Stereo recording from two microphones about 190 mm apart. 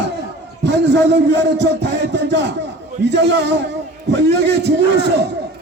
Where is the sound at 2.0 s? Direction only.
65° right (ahead or behind).